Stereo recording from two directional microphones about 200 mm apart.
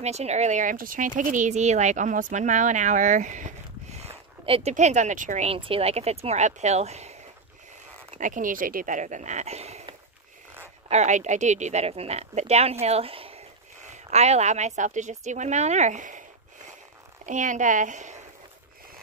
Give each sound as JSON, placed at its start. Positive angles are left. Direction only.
{"t": 0.0, "sound": "speech", "side_deg": -35}
{"t": 17.3, "sound": "speech", "side_deg": -40}